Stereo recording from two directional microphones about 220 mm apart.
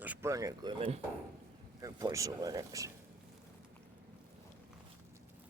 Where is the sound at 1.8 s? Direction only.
15° right (ahead or behind).